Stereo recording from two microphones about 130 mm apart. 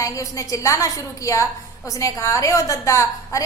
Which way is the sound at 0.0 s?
25° left (ahead or behind).